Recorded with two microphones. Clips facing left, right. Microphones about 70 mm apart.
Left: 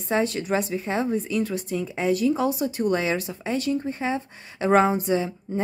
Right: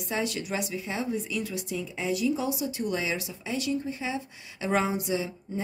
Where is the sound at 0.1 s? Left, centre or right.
Left.